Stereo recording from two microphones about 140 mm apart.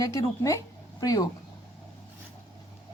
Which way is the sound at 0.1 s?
25° left (ahead or behind).